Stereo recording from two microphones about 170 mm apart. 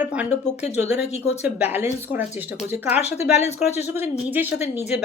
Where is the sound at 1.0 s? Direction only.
40° left (ahead or behind).